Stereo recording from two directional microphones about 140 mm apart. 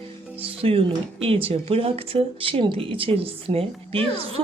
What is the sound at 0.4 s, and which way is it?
Speech, 40° right (ahead or behind).